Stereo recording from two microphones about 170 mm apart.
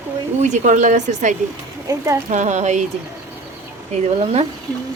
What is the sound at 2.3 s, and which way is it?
Speech, 45° right (ahead or behind).